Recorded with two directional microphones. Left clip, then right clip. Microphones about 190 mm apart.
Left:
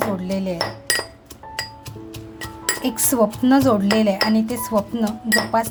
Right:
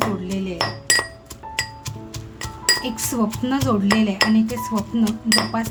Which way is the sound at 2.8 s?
30° left (ahead or behind).